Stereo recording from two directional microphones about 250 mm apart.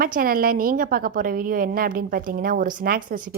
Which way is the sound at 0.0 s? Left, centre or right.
Right.